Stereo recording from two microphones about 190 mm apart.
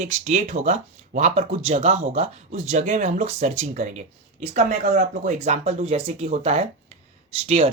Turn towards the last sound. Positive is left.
turn(degrees=-35)  # may be behind; listen again after turning